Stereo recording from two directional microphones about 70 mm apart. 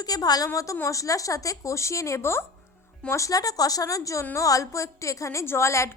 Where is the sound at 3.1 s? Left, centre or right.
Left.